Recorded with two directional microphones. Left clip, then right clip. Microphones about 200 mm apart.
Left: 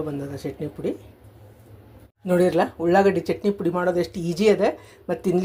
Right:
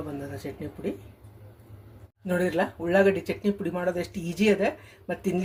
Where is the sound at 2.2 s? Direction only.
25° left (ahead or behind).